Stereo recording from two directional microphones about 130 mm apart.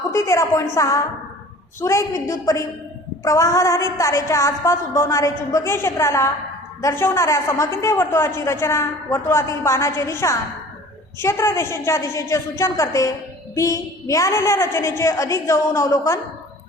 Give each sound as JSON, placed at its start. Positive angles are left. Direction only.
{"t": 0.1, "sound": "a woman's voice", "side_deg": 20}